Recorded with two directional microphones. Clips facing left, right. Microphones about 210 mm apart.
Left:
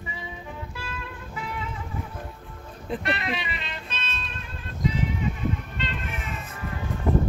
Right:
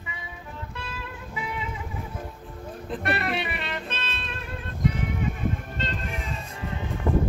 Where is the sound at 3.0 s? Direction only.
60° right (ahead or behind); by 6.8 s 25° right (ahead or behind).